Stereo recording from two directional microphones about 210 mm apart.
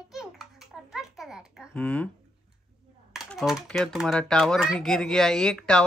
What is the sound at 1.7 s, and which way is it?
Speech, 5° left (ahead or behind).